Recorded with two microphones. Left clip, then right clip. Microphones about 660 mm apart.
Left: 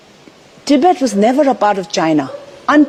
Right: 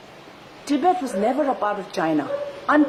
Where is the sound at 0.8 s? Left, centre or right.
Left.